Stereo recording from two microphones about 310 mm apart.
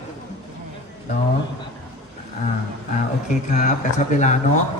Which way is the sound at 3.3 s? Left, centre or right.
Left.